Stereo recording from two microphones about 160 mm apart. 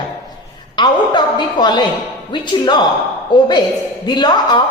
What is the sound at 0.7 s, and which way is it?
Speech, 30° left (ahead or behind).